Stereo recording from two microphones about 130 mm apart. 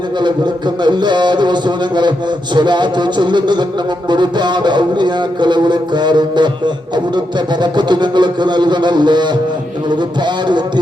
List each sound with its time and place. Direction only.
0.2 s a man's voice: 35° right (ahead or behind)